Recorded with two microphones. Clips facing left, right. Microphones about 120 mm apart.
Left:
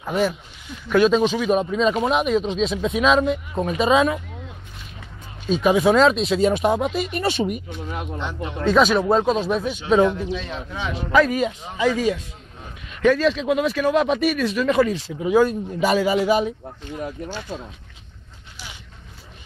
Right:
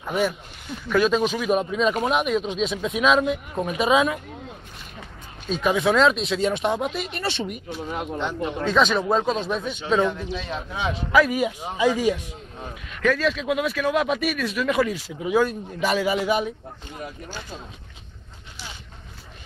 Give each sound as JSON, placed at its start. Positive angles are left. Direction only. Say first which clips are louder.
{"t": 0.0, "sound": "speech", "louder": "left 2 dB", "side_deg": 0}
{"t": 5.5, "sound": "speech", "louder": "left 4 dB", "side_deg": 5}
{"t": 10.7, "sound": "a man's voice", "louder": "left 1 dB", "side_deg": -15}
{"t": 13.0, "sound": "speech", "louder": "left 4 dB", "side_deg": 0}